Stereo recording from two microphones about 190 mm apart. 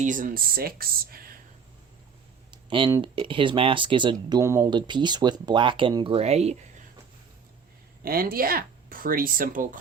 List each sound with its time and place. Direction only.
0.0 s speech: 45° right (ahead or behind)
2.5 s speech: 25° right (ahead or behind)
8.0 s speech: 50° right (ahead or behind)